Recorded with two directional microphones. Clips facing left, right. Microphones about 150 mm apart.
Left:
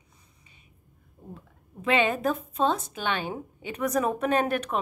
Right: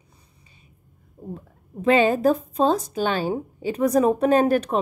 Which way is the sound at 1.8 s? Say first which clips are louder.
Right 7 dB; 35° right (ahead or behind).